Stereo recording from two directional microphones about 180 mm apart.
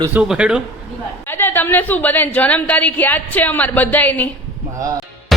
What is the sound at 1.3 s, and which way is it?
A woman's voice, 10° left (ahead or behind).